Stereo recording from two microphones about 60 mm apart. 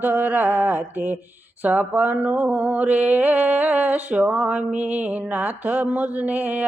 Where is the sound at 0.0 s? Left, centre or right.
Right.